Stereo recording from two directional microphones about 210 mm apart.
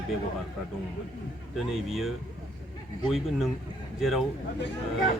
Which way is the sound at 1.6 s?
Centre (ahead or behind).